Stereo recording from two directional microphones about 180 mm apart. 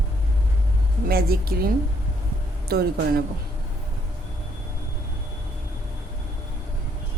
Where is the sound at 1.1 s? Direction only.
55° right (ahead or behind).